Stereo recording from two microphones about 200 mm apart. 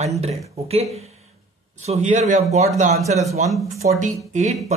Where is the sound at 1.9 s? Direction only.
35° right (ahead or behind).